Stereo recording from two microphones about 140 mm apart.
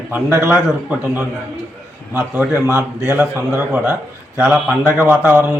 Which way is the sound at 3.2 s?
15° right (ahead or behind).